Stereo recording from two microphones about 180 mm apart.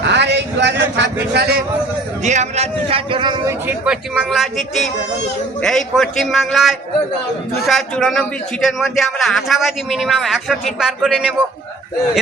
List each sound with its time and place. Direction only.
0.0 s a sound: 70° right (ahead or behind)
2.2 s a man's voice: 40° right (ahead or behind)
3.7 s a man's voice: 5° right (ahead or behind)